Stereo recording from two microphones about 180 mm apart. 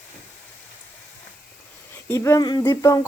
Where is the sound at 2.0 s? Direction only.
15° left (ahead or behind).